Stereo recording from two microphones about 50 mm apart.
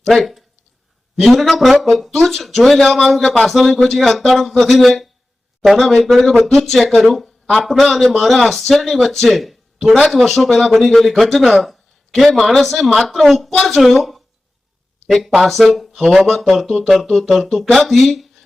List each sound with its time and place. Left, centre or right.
0.0 s speech: centre